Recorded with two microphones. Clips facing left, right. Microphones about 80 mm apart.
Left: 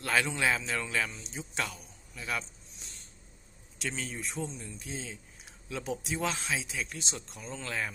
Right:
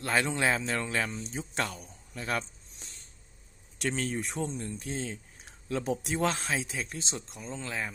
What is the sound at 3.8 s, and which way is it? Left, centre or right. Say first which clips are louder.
A man's voice: right 5 dB; right.